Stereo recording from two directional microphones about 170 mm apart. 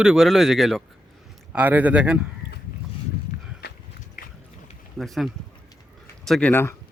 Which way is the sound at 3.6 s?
70° left (ahead or behind).